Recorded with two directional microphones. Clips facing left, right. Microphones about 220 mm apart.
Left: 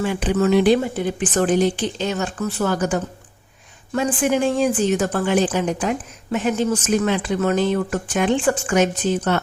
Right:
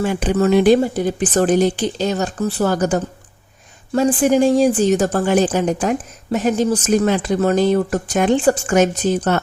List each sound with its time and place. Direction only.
0.0 s speech: 45° right (ahead or behind)